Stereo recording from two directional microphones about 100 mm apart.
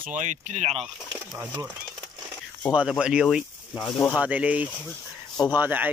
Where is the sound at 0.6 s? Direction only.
90° right.